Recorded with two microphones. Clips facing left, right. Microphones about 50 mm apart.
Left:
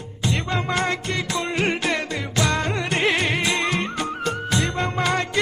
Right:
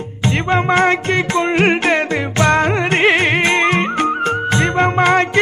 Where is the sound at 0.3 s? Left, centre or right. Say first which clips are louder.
Right 9 dB; right.